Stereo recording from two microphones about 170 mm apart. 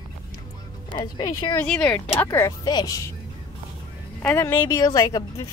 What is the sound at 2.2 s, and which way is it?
Speech, 15° left (ahead or behind).